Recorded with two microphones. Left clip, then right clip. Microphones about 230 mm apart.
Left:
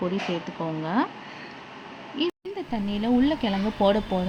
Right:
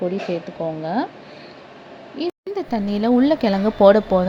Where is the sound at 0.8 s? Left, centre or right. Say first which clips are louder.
Right 1 dB; centre.